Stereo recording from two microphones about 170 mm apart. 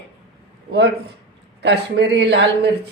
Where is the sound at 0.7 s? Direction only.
80° right.